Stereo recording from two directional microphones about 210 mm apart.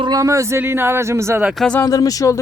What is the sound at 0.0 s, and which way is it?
Speech, 15° right (ahead or behind).